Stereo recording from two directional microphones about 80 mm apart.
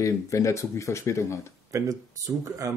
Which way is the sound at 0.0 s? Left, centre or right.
Left.